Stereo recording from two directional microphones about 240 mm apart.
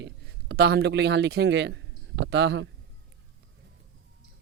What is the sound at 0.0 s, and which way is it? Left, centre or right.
Speech, right.